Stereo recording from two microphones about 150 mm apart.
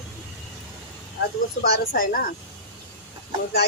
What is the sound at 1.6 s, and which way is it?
Speech, 70° left (ahead or behind).